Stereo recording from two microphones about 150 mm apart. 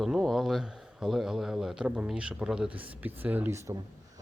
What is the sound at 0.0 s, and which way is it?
Speech, centre (ahead or behind).